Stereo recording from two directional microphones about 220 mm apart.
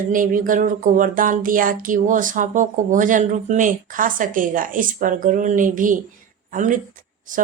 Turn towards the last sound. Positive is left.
turn(degrees=-35)  # may be behind; listen again after turning